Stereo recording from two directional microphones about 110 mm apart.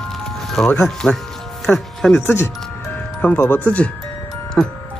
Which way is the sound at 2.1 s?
25° left (ahead or behind).